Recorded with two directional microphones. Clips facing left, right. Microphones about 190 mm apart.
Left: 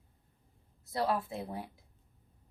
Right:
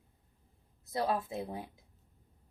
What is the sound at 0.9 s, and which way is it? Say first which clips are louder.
Speech: even; 20° right (ahead or behind).